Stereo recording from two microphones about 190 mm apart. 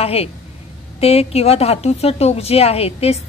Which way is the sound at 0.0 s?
30° left (ahead or behind).